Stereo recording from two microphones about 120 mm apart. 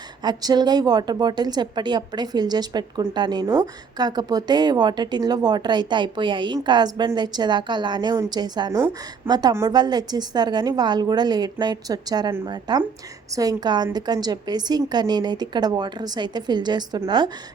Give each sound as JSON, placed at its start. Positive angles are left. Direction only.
{"t": 0.2, "sound": "speech", "side_deg": -35}
{"t": 3.4, "sound": "a woman's voice", "side_deg": -20}
{"t": 3.9, "sound": "speech", "side_deg": -35}
{"t": 8.7, "sound": "a woman's voice", "side_deg": -25}